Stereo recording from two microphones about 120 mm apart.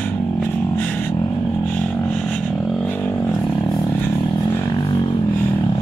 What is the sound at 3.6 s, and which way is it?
Vehicle, 35° left (ahead or behind).